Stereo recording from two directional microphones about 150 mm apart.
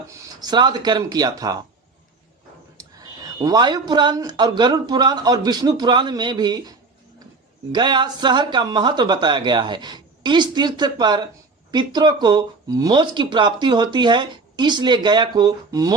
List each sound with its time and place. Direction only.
0.1 s speech: 25° right (ahead or behind)
2.7 s speech: 25° right (ahead or behind)